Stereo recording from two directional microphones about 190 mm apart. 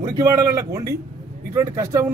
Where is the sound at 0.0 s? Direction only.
20° right (ahead or behind).